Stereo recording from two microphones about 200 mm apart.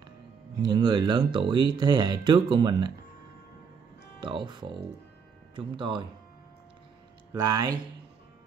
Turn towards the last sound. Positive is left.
turn(degrees=-20)  # may be behind; listen again after turning